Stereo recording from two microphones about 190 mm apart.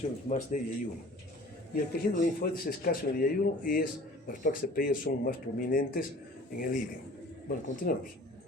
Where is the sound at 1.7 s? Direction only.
50° left (ahead or behind).